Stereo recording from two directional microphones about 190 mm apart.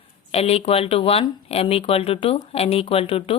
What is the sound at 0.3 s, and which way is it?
Speech, 30° left (ahead or behind).